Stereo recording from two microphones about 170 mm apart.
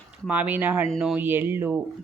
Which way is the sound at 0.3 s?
10° right (ahead or behind).